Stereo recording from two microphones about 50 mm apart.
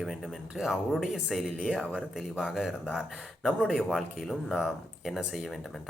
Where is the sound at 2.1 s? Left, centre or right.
Centre.